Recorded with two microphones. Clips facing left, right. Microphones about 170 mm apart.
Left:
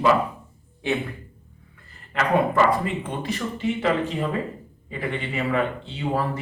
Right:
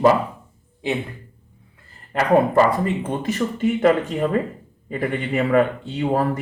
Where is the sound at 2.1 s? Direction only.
35° right (ahead or behind).